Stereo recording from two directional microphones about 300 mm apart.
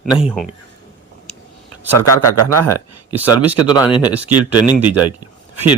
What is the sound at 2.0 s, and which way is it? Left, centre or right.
Speech, right.